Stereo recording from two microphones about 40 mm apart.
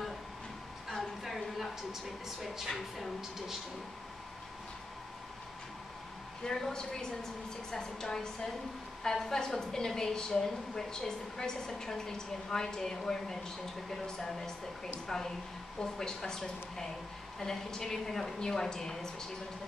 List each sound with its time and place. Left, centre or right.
1.2 s a sound: centre
6.4 s a woman's voice: centre
15.8 s a woman's voice: centre